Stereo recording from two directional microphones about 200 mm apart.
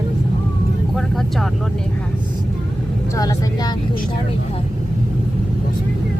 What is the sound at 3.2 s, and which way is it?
Speech, 20° left (ahead or behind).